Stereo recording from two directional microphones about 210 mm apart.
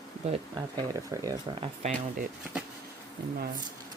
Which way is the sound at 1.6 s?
35° right (ahead or behind).